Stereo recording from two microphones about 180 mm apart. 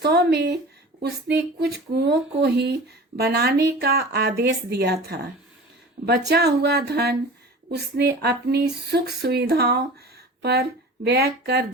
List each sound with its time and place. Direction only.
0.0 s speech: 65° right (ahead or behind)